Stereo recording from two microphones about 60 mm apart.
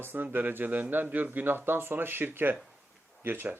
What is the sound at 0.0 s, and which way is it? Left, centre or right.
Speech, right.